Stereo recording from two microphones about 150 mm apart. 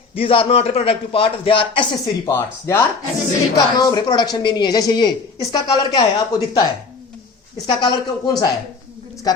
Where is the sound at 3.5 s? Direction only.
30° left (ahead or behind).